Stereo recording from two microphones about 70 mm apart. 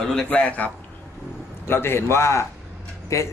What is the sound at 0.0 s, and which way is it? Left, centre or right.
Speech, centre.